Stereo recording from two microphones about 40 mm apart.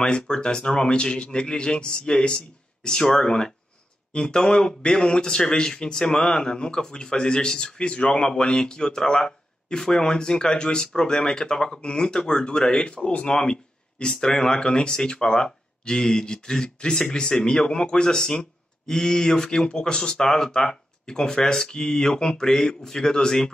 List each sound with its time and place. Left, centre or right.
0.0 s speech: left